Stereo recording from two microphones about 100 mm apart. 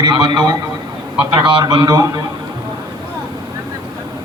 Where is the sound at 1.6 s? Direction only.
40° right (ahead or behind).